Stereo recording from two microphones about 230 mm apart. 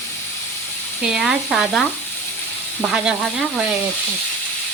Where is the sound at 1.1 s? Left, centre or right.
Centre.